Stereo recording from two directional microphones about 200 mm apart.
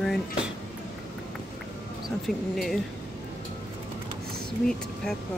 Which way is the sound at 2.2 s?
Centre (ahead or behind).